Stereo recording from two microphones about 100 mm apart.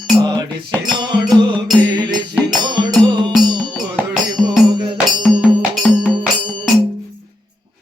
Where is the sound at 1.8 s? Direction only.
50° right (ahead or behind).